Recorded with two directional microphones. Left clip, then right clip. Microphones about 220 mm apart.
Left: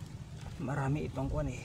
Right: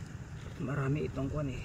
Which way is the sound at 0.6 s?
45° left (ahead or behind).